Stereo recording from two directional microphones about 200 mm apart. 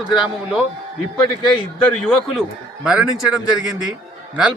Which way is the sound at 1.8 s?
5° left (ahead or behind).